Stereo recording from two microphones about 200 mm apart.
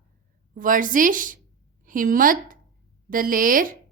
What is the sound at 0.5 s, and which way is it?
A woman's voice, 45° right (ahead or behind).